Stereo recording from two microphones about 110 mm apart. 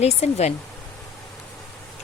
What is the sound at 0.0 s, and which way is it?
Speech, 85° left.